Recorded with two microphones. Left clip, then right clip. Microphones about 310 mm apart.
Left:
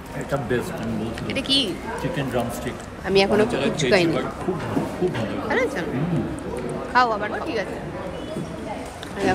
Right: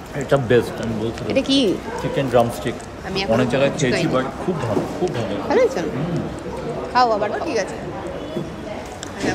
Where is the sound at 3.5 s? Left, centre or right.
Right.